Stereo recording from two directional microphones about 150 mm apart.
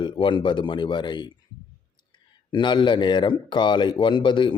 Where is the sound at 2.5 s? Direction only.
30° left (ahead or behind).